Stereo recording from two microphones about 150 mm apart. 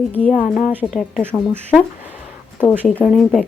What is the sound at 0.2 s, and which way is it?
Speech, 10° left (ahead or behind).